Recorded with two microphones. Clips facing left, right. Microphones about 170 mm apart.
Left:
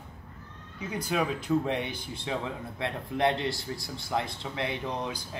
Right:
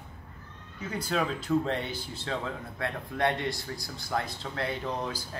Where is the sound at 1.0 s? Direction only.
10° left (ahead or behind).